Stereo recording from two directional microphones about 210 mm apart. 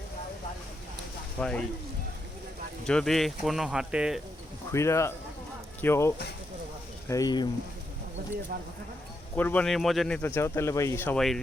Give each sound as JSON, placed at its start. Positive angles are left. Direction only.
{"t": 1.4, "sound": "speech", "side_deg": 5}
{"t": 2.8, "sound": "speech", "side_deg": 5}
{"t": 4.7, "sound": "speech", "side_deg": 15}
{"t": 9.3, "sound": "speech", "side_deg": 10}